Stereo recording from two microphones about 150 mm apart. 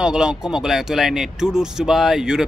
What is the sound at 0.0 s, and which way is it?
Speech, 5° right (ahead or behind).